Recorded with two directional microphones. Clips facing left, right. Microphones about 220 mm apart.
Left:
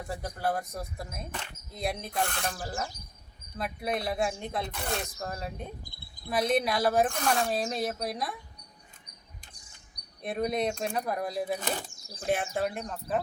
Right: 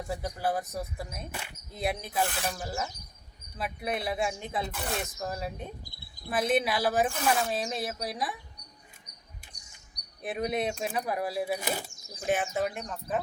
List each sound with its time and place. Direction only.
0.1 s speech: centre (ahead or behind)
5.8 s cricket: 50° left (ahead or behind)
6.3 s speech: 5° right (ahead or behind)
10.2 s speech: 5° right (ahead or behind)